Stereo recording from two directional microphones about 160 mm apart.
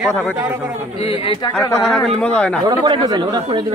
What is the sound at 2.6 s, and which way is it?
Speech, 25° right (ahead or behind).